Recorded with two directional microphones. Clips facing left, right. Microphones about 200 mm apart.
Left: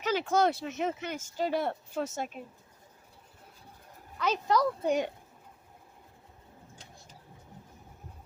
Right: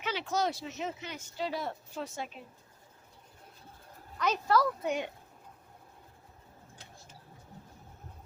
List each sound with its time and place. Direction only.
0.0 s speech: 45° left (ahead or behind)
4.2 s speech: 15° left (ahead or behind)
4.8 s speech: 35° left (ahead or behind)